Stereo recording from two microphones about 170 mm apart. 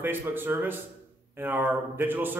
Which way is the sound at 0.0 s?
10° right (ahead or behind).